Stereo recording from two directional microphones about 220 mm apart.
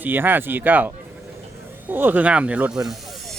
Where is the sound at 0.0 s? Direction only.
10° right (ahead or behind).